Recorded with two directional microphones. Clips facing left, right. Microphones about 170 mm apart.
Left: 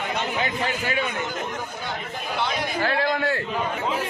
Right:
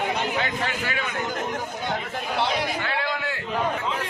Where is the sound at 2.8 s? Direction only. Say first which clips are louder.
Left 5 dB; 40° left (ahead or behind).